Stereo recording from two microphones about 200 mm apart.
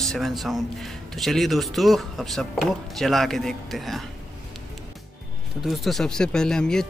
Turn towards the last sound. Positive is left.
turn(degrees=5)  # may be behind; listen again after turning